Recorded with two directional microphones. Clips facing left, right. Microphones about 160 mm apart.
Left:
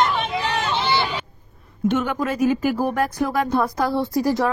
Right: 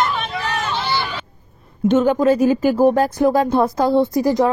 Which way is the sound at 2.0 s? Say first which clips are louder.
Right 7 dB; 30° right (ahead or behind).